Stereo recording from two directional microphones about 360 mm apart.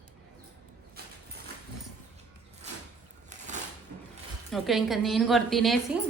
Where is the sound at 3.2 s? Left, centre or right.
Centre.